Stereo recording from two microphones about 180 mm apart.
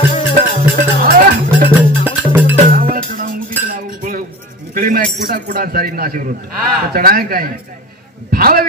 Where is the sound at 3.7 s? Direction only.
50° right (ahead or behind).